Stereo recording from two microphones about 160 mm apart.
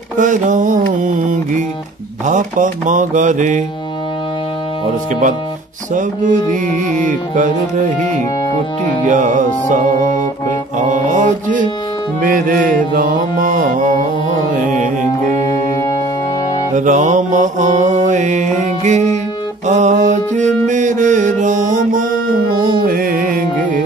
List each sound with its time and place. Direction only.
0.2 s mantra: 55° right (ahead or behind)
5.9 s mantra: 55° right (ahead or behind)
12.2 s mantra: 60° right (ahead or behind)
14.5 s music: 50° right (ahead or behind)
15.6 s music: 20° left (ahead or behind)
16.7 s mantra: 50° right (ahead or behind)
19.6 s music: 50° right (ahead or behind)
22.8 s music: 65° right (ahead or behind)